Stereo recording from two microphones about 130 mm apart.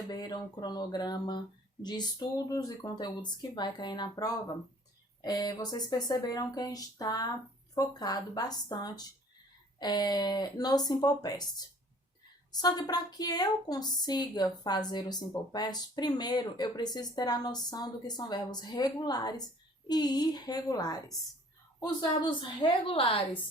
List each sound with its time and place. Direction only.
0.1 s a woman's voice: 30° left (ahead or behind)